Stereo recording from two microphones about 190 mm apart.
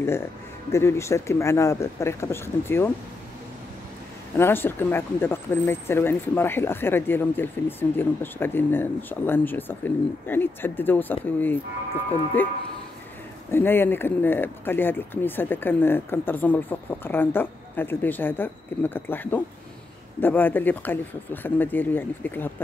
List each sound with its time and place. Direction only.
0.7 s speech: 15° left (ahead or behind)
4.4 s speech: 10° left (ahead or behind)